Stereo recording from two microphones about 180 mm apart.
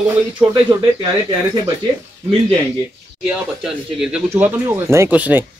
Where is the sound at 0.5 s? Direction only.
15° right (ahead or behind).